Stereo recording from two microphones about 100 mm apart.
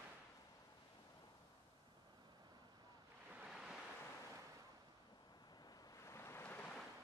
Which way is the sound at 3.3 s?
10° right (ahead or behind).